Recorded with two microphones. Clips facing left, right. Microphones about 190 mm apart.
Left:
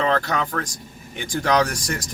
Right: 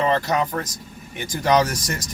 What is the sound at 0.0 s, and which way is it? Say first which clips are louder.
A man's voice: right 1 dB; 10° right (ahead or behind).